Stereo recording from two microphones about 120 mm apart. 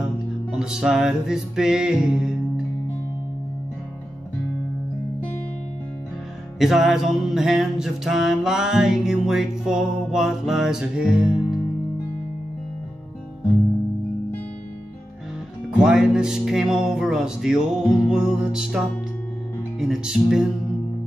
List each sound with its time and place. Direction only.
0.0 s music: 5° right (ahead or behind)
6.6 s music: 5° right (ahead or behind)
15.8 s music: 5° right (ahead or behind)
19.8 s music: 5° right (ahead or behind)